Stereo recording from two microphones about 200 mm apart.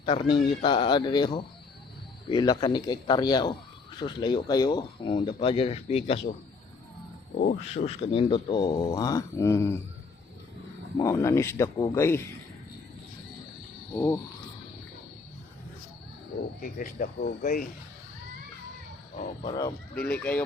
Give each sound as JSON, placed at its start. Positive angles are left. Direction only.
{"t": 0.0, "sound": "speech", "side_deg": 25}
{"t": 7.7, "sound": "speech", "side_deg": 30}
{"t": 10.9, "sound": "speech", "side_deg": 15}
{"t": 13.9, "sound": "speech", "side_deg": 15}
{"t": 16.7, "sound": "speech", "side_deg": 45}
{"t": 19.2, "sound": "speech", "side_deg": 35}
{"t": 20.1, "sound": "speech", "side_deg": 5}